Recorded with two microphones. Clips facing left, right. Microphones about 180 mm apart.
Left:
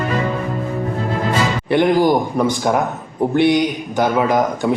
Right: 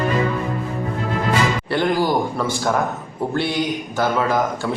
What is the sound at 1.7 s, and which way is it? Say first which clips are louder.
Speech: left 7 dB; 20° left (ahead or behind).